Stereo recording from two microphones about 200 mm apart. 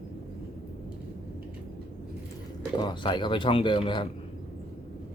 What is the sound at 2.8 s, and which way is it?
Speech, 20° left (ahead or behind).